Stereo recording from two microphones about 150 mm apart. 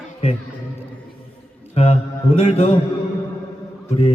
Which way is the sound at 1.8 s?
40° left (ahead or behind).